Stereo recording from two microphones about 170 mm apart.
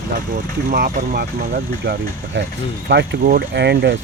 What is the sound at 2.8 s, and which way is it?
Speech, 85° right.